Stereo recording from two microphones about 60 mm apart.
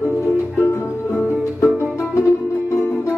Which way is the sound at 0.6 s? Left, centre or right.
Left.